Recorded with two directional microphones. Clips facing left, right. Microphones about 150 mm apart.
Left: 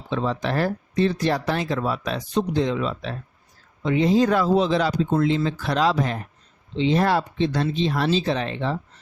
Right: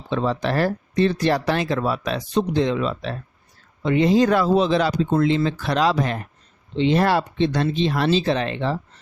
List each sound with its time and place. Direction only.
0.1 s speech: 70° right (ahead or behind)